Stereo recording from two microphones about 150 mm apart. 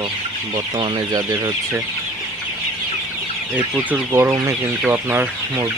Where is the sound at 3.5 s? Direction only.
10° right (ahead or behind).